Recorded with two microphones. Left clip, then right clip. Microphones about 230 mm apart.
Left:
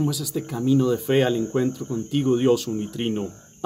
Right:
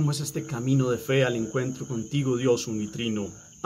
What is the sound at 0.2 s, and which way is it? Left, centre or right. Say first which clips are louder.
Speech: left 5 dB; centre.